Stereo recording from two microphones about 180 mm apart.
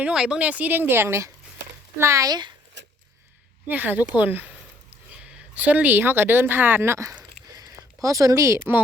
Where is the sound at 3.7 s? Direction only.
10° right (ahead or behind).